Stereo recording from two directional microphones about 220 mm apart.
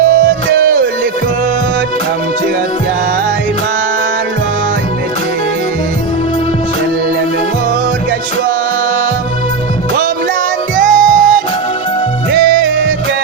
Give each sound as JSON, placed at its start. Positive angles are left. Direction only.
{"t": 0.2, "sound": "music", "side_deg": -40}
{"t": 10.8, "sound": "music", "side_deg": -35}